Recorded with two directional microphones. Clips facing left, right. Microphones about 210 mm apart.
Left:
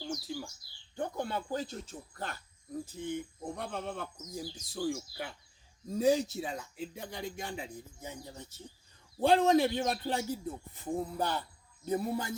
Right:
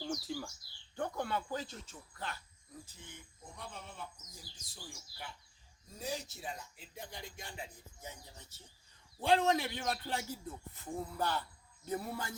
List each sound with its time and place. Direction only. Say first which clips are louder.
0.1 s bird: left 2 dB; centre (ahead or behind)
0.9 s speech: left 2 dB; 20° left (ahead or behind); by 7.6 s 70° left (ahead or behind)
8.0 s speech: left 5 dB; 50° left (ahead or behind)
9.2 s a man's voice: left 6 dB; 35° left (ahead or behind)
10.8 s music: left 5 dB; 15° left (ahead or behind)
11.9 s a man's voice: left 7 dB; 20° left (ahead or behind)